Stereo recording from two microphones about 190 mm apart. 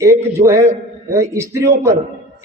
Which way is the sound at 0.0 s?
15° right (ahead or behind).